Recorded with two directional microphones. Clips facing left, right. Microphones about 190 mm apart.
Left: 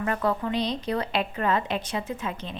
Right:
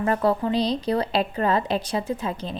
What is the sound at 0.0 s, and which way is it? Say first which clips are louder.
A woman's voice: right 4 dB; 35° right (ahead or behind).